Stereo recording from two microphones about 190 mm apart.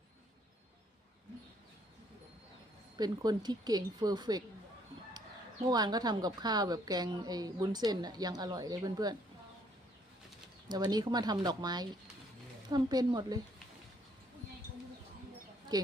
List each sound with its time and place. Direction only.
3.0 s a woman's voice: 20° right (ahead or behind)
5.7 s a woman's voice: 20° right (ahead or behind)
10.7 s a woman's voice: 20° right (ahead or behind)
15.7 s a woman's voice: 20° right (ahead or behind)